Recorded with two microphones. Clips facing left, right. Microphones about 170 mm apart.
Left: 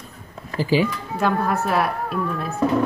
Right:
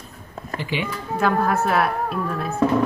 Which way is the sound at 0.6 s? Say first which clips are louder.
Left 8 dB; 35° left (ahead or behind).